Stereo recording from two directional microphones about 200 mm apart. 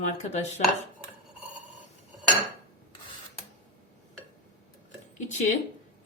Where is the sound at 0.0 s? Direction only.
35° left (ahead or behind).